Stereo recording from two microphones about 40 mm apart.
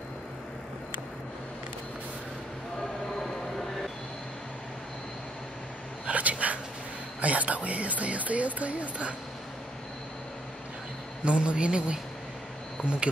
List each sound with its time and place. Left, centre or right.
6.0 s a sound: right
7.2 s speech: right
11.2 s a man's voice: right